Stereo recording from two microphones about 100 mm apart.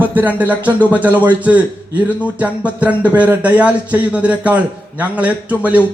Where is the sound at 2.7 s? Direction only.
15° right (ahead or behind).